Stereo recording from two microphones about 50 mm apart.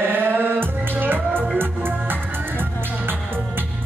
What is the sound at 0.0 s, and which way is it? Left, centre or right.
Music, right.